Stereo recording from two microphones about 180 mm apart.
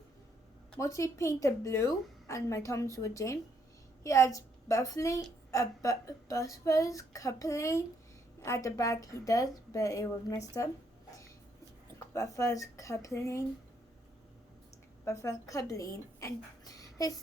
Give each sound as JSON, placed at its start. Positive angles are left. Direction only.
{"t": 0.8, "sound": "a woman's voice", "side_deg": 15}
{"t": 12.1, "sound": "a woman's voice", "side_deg": 20}
{"t": 15.0, "sound": "a woman's voice", "side_deg": 15}